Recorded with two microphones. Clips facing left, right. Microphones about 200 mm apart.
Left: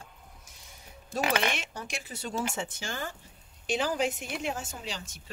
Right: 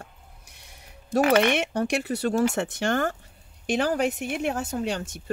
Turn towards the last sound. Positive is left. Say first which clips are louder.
# right 11 dB
turn(degrees=-60)  # may be behind; listen again after turning